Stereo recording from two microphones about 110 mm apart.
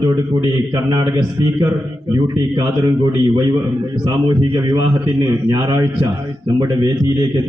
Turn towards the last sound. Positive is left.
turn(degrees=-35)  # may be behind; listen again after turning